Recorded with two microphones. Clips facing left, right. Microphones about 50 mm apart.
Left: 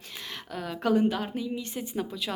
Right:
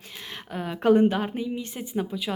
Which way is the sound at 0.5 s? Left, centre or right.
Right.